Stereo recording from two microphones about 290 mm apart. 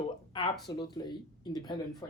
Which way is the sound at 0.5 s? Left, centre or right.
Centre.